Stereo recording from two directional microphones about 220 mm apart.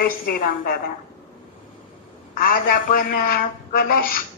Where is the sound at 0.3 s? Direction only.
40° left (ahead or behind).